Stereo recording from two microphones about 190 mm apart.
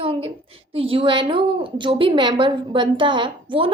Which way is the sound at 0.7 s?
30° right (ahead or behind).